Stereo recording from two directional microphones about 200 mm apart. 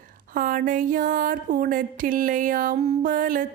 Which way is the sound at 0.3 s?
45° right (ahead or behind).